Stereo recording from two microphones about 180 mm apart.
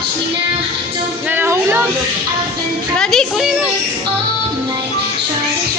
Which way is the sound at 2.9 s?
5° left (ahead or behind).